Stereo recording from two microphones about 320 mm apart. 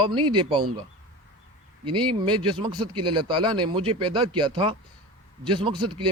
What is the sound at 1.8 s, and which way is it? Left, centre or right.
Speech, centre.